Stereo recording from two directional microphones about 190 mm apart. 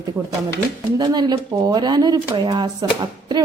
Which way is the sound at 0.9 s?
20° right (ahead or behind).